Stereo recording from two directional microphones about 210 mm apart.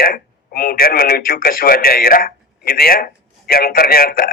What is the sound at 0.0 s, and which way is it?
Speech, 45° left (ahead or behind).